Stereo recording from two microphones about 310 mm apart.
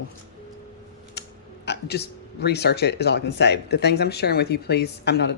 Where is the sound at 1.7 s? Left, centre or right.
Left.